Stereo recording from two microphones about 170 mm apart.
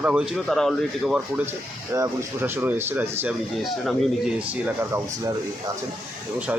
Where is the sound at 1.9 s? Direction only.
15° right (ahead or behind).